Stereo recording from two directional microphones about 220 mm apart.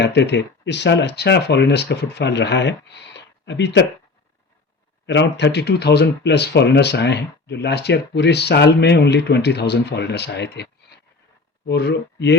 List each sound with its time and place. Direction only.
0.0 s speech: 50° left (ahead or behind)
5.0 s speech: 50° left (ahead or behind)